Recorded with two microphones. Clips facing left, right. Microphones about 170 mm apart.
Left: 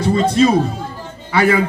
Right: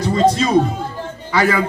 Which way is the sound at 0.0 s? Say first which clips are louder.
Left 2 dB; 30° left (ahead or behind).